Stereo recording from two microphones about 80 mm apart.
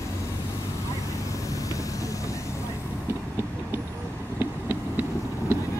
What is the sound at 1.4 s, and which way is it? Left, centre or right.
Vehicle, left.